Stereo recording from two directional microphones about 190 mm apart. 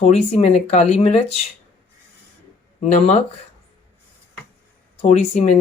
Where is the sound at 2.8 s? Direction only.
35° left (ahead or behind).